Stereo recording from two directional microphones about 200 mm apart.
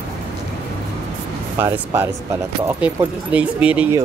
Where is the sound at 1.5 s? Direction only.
10° right (ahead or behind).